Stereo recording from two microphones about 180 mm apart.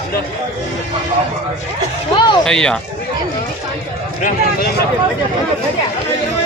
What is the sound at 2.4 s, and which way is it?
Speech, 5° left (ahead or behind).